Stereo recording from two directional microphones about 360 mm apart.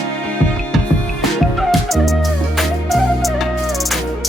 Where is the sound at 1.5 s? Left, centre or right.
Centre.